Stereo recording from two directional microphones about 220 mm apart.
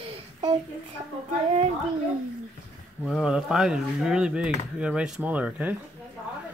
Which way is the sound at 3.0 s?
Centre (ahead or behind).